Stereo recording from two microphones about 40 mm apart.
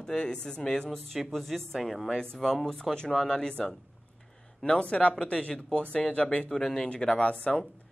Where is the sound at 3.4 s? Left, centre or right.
Centre.